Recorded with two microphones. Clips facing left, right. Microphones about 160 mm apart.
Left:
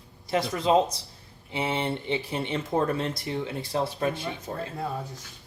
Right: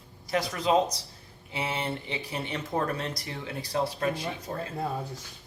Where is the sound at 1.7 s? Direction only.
Centre (ahead or behind).